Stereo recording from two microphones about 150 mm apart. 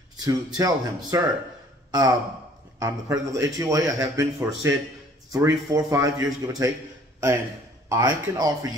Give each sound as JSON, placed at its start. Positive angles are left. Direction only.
{"t": 0.2, "sound": "a man's voice", "side_deg": -25}
{"t": 7.9, "sound": "a man's voice", "side_deg": -25}